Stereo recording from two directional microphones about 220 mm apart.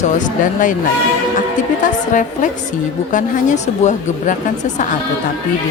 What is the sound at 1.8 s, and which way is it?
Speech, 35° left (ahead or behind).